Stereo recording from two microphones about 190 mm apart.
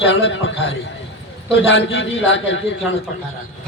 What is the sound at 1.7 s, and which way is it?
A man's voice, 90° left.